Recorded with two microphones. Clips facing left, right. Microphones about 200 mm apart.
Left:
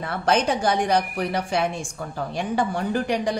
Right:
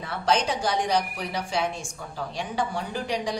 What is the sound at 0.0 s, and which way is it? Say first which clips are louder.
A woman's voice: left 3 dB; 55° left (ahead or behind).